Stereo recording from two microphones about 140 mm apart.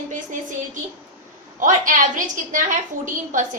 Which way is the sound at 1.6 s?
70° right (ahead or behind).